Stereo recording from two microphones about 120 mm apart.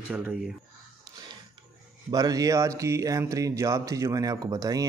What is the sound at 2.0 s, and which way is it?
A man's voice, 35° right (ahead or behind).